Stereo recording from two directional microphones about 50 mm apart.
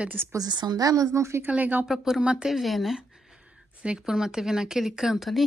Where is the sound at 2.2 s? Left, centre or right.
Right.